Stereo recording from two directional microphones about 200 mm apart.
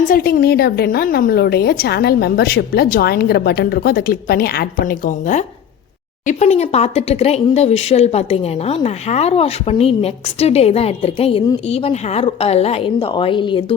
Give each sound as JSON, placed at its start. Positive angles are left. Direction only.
{"t": 0.1, "sound": "a woman's voice", "side_deg": 45}